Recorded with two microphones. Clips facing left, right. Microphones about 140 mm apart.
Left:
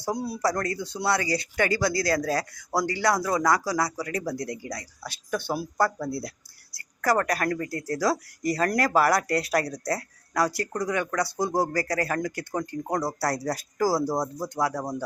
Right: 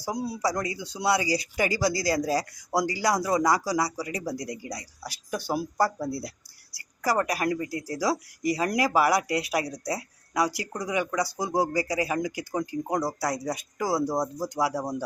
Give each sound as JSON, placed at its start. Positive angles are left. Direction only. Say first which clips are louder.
{"t": 0.1, "sound": "speech", "louder": "left 1 dB", "side_deg": -15}
{"t": 3.4, "sound": "speech", "louder": "even", "side_deg": -30}
{"t": 3.9, "sound": "speech", "louder": "left 2 dB", "side_deg": -10}
{"t": 11.7, "sound": "speech", "louder": "even", "side_deg": 65}
{"t": 11.9, "sound": "speech", "louder": "even", "side_deg": -10}
{"t": 13.1, "sound": "speech", "louder": "left 1 dB", "side_deg": 0}